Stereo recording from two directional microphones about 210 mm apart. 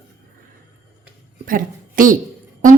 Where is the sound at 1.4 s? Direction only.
40° right (ahead or behind).